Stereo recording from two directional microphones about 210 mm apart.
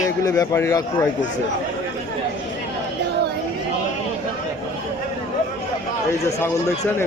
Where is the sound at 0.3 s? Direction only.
15° left (ahead or behind).